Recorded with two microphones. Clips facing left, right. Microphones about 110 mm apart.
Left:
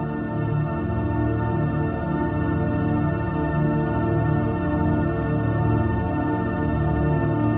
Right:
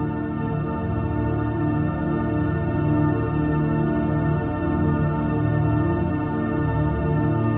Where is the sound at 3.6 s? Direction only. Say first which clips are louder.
Even; 15° left (ahead or behind).